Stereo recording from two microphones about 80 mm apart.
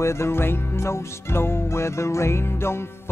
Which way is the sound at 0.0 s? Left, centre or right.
Left.